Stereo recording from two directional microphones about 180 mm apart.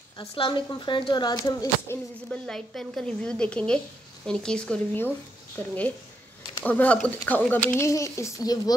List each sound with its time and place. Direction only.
0.2 s speech: 30° left (ahead or behind)
2.2 s a woman's voice: 5° left (ahead or behind); by 8.7 s 20° left (ahead or behind)